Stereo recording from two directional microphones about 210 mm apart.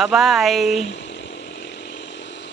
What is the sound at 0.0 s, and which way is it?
Speech, centre (ahead or behind).